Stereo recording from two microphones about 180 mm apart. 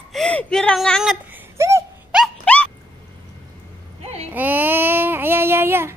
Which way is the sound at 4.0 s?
35° right (ahead or behind).